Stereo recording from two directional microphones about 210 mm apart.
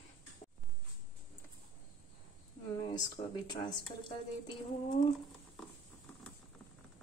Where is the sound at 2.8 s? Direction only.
20° left (ahead or behind).